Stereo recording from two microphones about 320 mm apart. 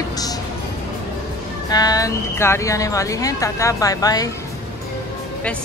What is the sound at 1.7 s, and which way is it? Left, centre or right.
Speech, centre.